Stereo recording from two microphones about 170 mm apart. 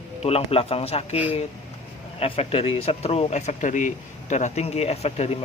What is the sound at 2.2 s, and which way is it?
Speech, 35° left (ahead or behind).